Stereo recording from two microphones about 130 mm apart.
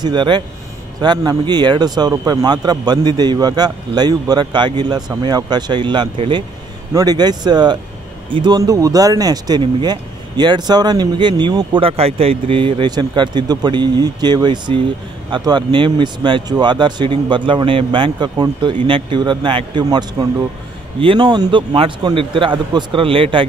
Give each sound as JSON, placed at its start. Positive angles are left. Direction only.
{"t": 0.0, "sound": "speech", "side_deg": -35}